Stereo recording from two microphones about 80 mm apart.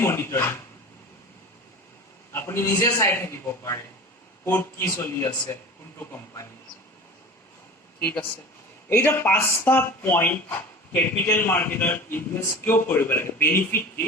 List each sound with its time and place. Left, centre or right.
0.0 s speech: left
2.3 s speech: left
4.4 s speech: left
8.9 s a man's voice: left